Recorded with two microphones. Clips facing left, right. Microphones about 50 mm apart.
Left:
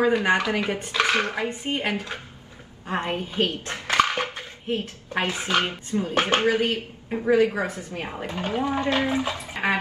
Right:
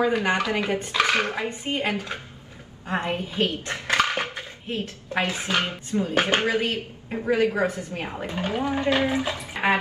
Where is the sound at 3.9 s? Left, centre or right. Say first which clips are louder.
Left 1 dB; right.